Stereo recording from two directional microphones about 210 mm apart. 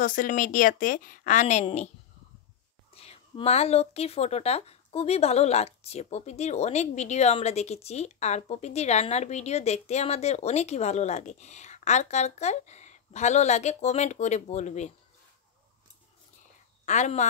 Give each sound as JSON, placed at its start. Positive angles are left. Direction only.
{"t": 0.0, "sound": "a woman's voice", "side_deg": 40}
{"t": 2.9, "sound": "a woman's voice", "side_deg": 30}
{"t": 16.8, "sound": "speech", "side_deg": 35}